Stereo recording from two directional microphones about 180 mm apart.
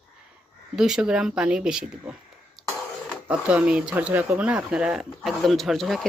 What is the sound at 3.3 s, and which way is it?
Speech, 5° right (ahead or behind).